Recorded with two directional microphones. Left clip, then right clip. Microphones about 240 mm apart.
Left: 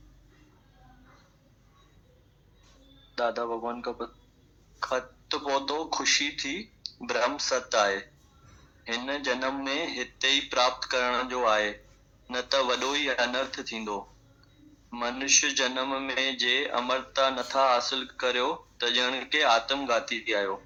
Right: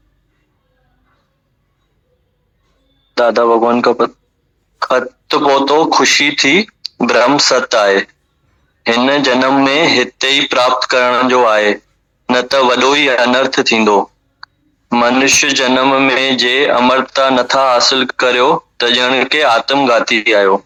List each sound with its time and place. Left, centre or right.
3.2 s speech: right